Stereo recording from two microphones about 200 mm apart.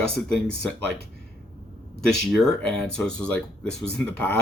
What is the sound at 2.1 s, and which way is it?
Speech, centre (ahead or behind).